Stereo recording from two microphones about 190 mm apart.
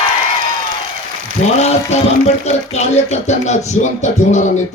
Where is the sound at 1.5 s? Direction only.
35° left (ahead or behind).